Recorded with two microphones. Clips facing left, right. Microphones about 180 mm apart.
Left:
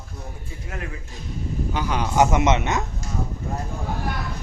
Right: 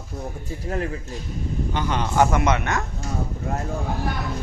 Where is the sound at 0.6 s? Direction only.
35° right (ahead or behind).